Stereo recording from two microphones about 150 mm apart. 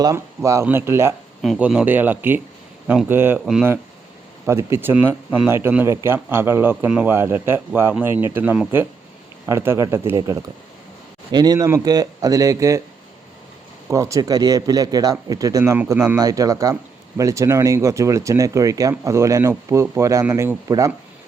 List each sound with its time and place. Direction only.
0.0 s a man's voice: 20° right (ahead or behind); by 3.7 s 5° right (ahead or behind)
4.4 s a man's voice: 15° right (ahead or behind)
13.9 s speech: 20° right (ahead or behind)